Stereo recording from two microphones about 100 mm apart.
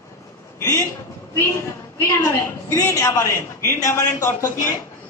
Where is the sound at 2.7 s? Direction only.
35° left (ahead or behind).